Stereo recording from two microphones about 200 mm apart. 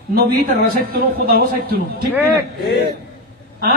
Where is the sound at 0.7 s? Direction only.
45° right (ahead or behind).